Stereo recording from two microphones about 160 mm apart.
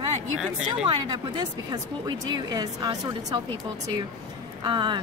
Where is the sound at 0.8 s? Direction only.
25° right (ahead or behind).